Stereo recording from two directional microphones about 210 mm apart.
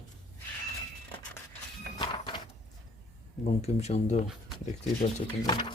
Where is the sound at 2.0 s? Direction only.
20° left (ahead or behind).